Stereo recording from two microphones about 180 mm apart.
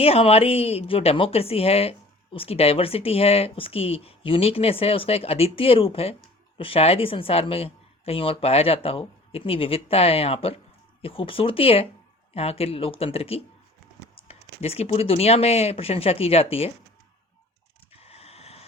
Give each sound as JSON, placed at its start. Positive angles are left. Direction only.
{"t": 0.0, "sound": "a woman's voice", "side_deg": 35}
{"t": 14.6, "sound": "a woman's voice", "side_deg": 35}
{"t": 17.9, "sound": "a sound", "side_deg": 35}